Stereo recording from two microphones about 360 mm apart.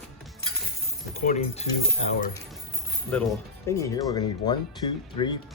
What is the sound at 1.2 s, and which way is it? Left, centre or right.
Cutlery, centre.